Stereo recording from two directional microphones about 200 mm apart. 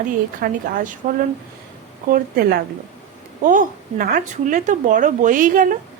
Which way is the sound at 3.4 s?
40° right (ahead or behind).